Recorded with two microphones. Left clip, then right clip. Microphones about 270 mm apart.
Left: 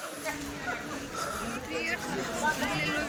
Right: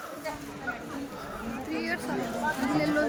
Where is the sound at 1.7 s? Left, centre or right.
Right.